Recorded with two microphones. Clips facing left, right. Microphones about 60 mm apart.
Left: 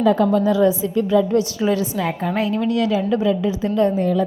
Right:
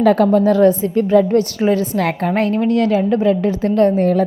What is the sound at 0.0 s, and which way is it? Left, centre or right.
Speech, right.